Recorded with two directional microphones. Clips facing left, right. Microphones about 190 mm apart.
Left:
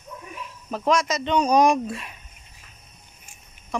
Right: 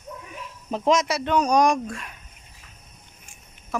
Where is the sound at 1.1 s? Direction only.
5° right (ahead or behind).